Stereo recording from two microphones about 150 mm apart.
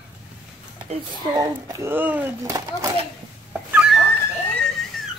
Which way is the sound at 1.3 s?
15° right (ahead or behind).